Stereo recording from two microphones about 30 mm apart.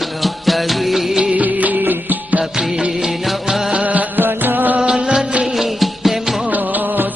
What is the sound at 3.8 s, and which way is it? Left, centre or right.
Music, right.